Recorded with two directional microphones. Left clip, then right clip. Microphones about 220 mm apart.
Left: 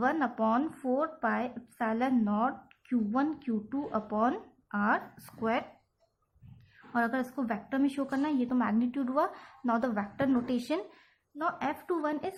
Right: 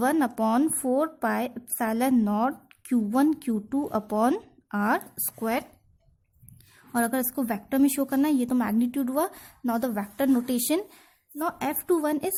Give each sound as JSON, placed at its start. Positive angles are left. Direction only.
{"t": 0.0, "sound": "a woman's voice", "side_deg": -55}
{"t": 6.9, "sound": "a woman's voice", "side_deg": -55}